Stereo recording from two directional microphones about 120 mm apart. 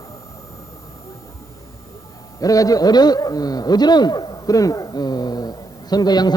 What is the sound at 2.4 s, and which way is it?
A man's voice, 30° left (ahead or behind).